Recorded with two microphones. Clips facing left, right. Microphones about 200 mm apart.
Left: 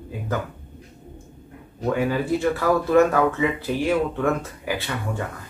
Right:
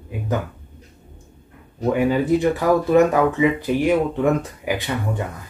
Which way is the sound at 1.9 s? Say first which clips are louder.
Right 5 dB; 15° right (ahead or behind).